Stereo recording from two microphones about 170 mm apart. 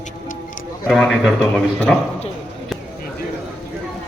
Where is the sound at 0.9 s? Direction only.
Centre (ahead or behind).